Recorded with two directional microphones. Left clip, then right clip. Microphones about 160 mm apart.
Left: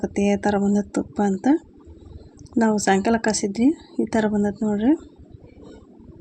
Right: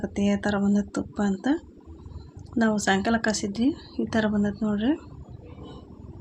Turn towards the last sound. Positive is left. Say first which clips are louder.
# left 5 dB
turn(degrees=25)  # may be behind; listen again after turning